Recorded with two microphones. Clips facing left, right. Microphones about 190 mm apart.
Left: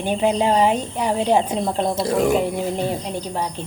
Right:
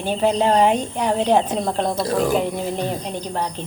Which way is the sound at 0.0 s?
15° left (ahead or behind).